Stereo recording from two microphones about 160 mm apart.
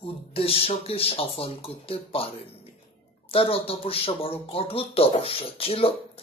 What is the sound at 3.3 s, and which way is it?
Speech, 35° left (ahead or behind).